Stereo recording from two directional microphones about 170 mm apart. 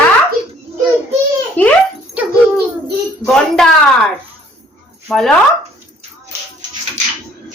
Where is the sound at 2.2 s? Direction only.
10° right (ahead or behind).